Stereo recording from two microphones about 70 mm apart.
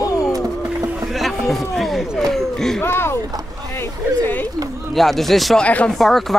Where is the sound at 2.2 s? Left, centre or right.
Centre.